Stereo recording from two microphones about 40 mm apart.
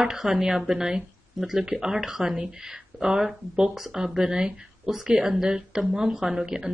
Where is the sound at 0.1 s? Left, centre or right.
Centre.